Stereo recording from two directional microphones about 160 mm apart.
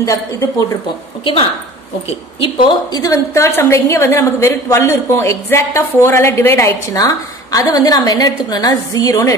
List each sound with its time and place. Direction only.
0.0 s a woman's voice: 20° left (ahead or behind)
2.0 s a woman's voice: 35° left (ahead or behind)